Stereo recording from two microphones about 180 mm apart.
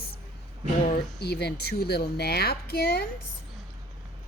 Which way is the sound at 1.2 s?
65° left (ahead or behind).